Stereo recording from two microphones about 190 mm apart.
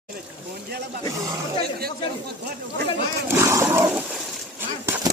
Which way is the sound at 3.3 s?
15° right (ahead or behind).